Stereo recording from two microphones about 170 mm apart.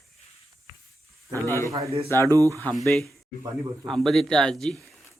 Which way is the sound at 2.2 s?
20° right (ahead or behind).